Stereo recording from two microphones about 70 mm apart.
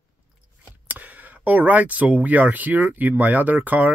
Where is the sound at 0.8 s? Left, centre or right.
Right.